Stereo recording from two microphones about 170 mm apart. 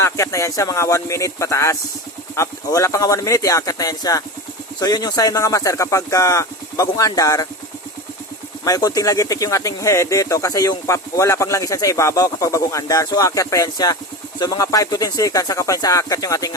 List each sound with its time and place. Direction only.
0.0 s speech: 15° left (ahead or behind)
8.6 s speech: 20° left (ahead or behind)